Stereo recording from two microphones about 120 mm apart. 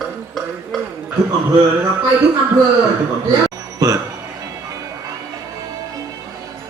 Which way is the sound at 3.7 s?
30° right (ahead or behind).